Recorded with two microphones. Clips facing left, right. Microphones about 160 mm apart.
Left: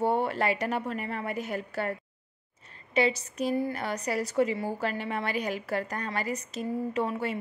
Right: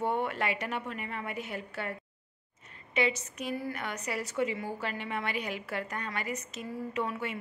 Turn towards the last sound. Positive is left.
turn(degrees=35)  # may be behind; listen again after turning